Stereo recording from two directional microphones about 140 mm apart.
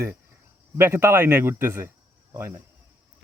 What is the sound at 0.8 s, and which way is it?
A man's voice, 20° right (ahead or behind).